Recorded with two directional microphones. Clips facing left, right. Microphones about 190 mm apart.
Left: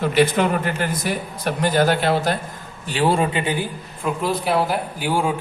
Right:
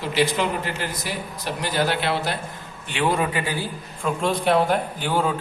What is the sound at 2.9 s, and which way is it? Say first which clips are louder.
Speech: left 4 dB; 35° left (ahead or behind).